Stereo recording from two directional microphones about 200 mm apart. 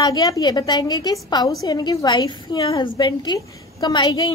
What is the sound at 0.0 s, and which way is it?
A woman's voice, 20° left (ahead or behind).